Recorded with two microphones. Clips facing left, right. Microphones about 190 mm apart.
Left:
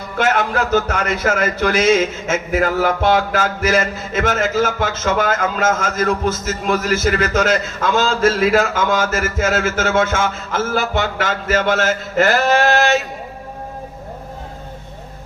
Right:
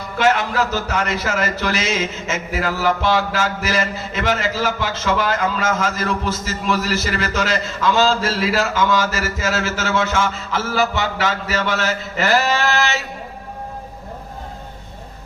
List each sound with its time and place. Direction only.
0.2 s speech: 50° left (ahead or behind)